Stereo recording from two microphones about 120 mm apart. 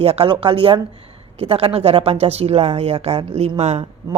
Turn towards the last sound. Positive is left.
turn(degrees=-65)  # may be behind; listen again after turning